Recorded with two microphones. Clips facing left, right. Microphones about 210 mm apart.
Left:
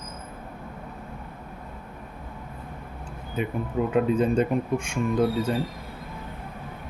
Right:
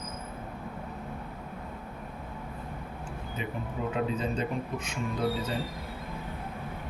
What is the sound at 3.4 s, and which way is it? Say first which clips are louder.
Speech: left 8 dB; 55° left (ahead or behind).